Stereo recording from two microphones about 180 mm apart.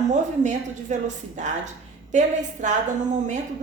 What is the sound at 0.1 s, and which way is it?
A woman's voice, 40° right (ahead or behind).